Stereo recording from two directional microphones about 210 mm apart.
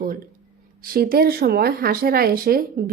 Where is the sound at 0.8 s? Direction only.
45° right (ahead or behind).